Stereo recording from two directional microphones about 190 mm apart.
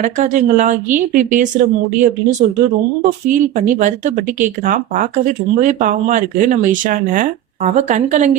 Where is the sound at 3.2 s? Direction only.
40° right (ahead or behind).